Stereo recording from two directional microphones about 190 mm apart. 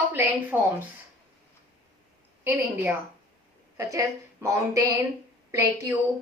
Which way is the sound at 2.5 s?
10° right (ahead or behind).